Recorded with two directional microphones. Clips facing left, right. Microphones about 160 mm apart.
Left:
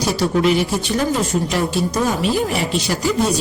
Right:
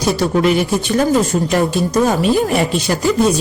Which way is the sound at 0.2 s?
50° right (ahead or behind).